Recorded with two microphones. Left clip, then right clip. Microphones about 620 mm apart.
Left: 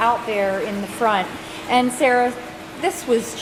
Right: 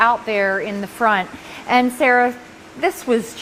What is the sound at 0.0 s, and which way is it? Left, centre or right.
A woman's voice, right.